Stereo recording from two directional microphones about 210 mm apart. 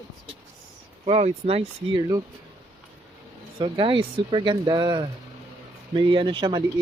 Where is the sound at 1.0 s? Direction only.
30° right (ahead or behind).